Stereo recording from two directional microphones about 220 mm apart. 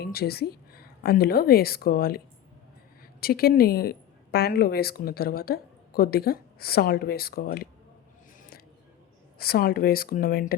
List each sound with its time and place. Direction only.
0.0 s a woman's voice: 45° left (ahead or behind)
9.4 s a woman's voice: 45° left (ahead or behind)